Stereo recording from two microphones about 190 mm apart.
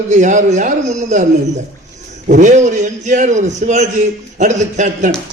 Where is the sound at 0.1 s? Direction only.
40° right (ahead or behind).